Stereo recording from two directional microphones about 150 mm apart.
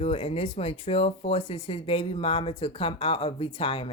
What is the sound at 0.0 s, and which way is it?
Speech, 40° left (ahead or behind).